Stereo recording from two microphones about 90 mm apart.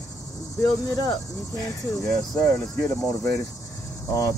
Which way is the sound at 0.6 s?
45° left (ahead or behind).